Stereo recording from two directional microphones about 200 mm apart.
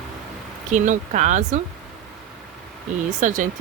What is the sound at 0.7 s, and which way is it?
Speech, 40° right (ahead or behind).